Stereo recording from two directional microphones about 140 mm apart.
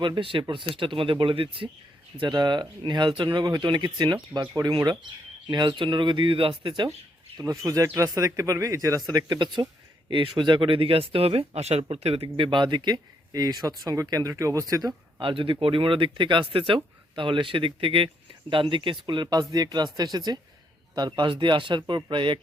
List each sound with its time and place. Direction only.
0.0 s speech: 35° right (ahead or behind)
7.3 s speech: 25° right (ahead or behind)